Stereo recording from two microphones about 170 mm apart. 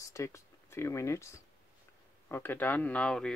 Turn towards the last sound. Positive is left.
turn(degrees=5)  # may be behind; listen again after turning